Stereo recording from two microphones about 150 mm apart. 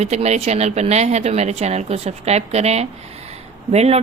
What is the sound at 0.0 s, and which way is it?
Speech, 45° right (ahead or behind).